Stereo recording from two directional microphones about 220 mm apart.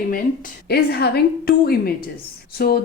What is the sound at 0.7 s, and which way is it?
Speech, 45° left (ahead or behind).